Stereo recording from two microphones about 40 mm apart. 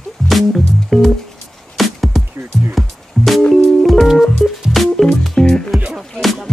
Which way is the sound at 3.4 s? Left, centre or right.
Centre.